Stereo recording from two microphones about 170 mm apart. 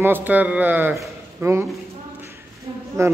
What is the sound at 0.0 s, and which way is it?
Speech, 10° right (ahead or behind).